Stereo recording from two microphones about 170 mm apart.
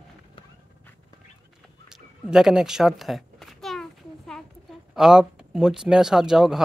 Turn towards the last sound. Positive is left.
turn(degrees=-5)  # may be behind; listen again after turning